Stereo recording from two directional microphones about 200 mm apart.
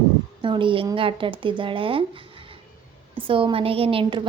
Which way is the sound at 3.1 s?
25° right (ahead or behind).